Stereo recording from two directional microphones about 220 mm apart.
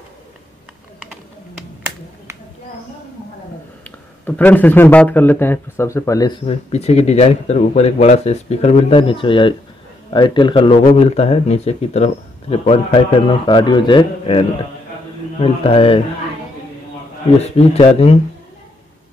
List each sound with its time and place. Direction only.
3.8 s speech: 5° left (ahead or behind); by 10.8 s 20° left (ahead or behind)
10.8 s speech: 35° left (ahead or behind)
17.4 s speech: 30° left (ahead or behind)